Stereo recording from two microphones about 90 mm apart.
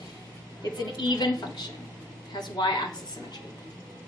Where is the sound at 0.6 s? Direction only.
50° left (ahead or behind).